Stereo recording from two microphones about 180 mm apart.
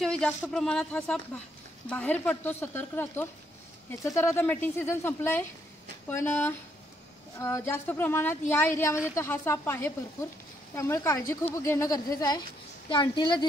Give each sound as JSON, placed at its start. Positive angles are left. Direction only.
{"t": 0.0, "sound": "speech", "side_deg": 5}